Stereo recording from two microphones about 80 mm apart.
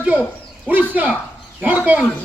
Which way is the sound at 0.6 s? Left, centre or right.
Centre.